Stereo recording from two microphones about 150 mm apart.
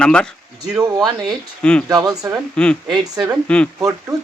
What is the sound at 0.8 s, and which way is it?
Speech, 25° right (ahead or behind).